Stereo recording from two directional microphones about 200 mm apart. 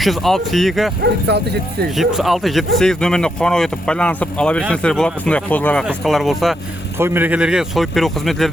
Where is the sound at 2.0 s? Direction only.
Centre (ahead or behind).